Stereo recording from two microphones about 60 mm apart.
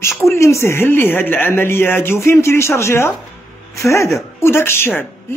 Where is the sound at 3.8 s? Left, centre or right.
Left.